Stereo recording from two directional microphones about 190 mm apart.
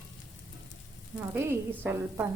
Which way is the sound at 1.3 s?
10° right (ahead or behind).